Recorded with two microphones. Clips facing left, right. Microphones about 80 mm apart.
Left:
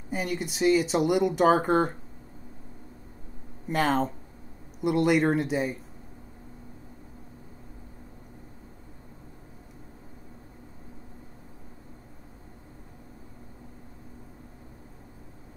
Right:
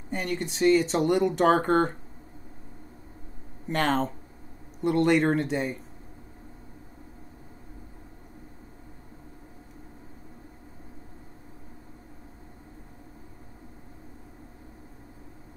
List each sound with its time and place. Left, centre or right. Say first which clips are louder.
0.1 s speech: even; centre
3.6 s speech: left 1 dB; centre